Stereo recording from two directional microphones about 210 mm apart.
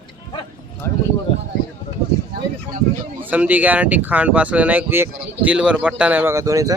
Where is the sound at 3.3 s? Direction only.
5° right (ahead or behind).